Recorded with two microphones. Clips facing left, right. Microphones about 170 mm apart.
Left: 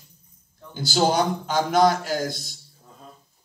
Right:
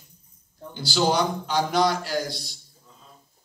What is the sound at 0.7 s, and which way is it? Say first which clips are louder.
A man's voice: left 2 dB; 45° left (ahead or behind).